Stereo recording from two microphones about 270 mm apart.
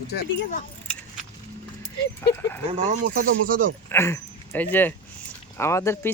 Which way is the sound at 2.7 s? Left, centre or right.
Right.